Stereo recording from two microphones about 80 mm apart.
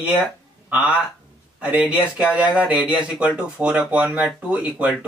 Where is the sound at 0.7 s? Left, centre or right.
Centre.